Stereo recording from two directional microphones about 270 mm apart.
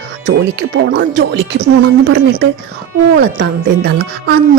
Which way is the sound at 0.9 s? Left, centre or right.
Right.